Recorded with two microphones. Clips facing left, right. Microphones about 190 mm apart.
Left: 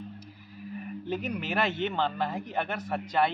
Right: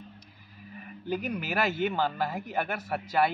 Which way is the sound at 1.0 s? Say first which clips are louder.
Right 2 dB; centre (ahead or behind).